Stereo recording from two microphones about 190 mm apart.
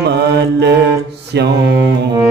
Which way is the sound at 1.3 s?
60° right (ahead or behind).